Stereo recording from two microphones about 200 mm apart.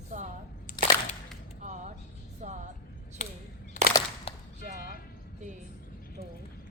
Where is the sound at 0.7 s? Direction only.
40° left (ahead or behind).